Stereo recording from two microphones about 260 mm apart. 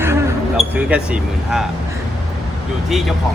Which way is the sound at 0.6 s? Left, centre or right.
Centre.